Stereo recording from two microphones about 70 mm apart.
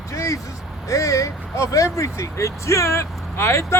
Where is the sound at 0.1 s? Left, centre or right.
Left.